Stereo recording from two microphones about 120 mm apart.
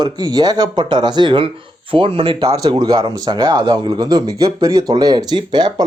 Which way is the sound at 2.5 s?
35° right (ahead or behind).